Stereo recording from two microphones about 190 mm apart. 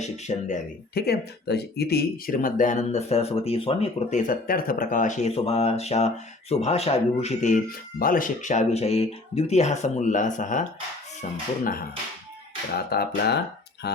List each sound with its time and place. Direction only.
0.0 s speech: 40° left (ahead or behind)
1.0 s speech: 60° left (ahead or behind); by 4.2 s 30° left (ahead or behind)
4.3 s speech: 50° left (ahead or behind)
12.9 s speech: 55° left (ahead or behind)
13.8 s music: 60° left (ahead or behind)